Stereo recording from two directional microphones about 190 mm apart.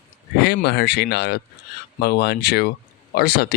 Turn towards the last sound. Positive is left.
turn(degrees=55)  # may be behind; listen again after turning